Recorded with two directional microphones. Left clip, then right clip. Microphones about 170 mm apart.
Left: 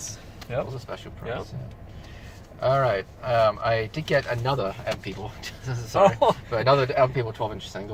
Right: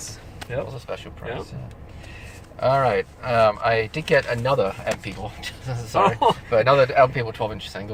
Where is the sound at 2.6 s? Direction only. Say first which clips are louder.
Right 3 dB; 30° right (ahead or behind).